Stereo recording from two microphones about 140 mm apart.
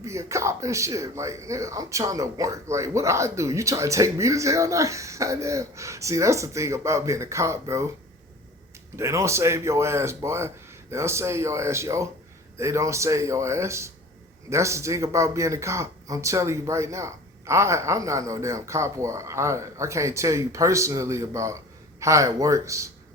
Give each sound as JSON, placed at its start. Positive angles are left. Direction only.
{"t": 0.0, "sound": "speech", "side_deg": -20}
{"t": 9.0, "sound": "speech", "side_deg": -20}